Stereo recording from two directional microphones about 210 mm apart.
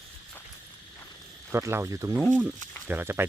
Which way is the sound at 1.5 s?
10° right (ahead or behind).